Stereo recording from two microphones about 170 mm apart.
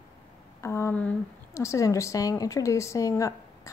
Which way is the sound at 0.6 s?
15° left (ahead or behind).